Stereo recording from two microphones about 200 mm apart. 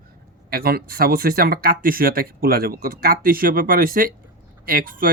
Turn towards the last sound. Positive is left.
turn(degrees=-45)  # may be behind; listen again after turning